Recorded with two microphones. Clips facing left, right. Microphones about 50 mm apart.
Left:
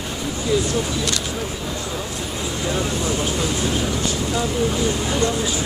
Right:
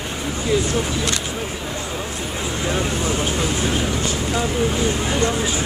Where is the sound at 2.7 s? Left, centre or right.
Right.